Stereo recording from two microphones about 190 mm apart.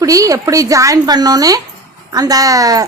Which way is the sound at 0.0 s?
15° right (ahead or behind).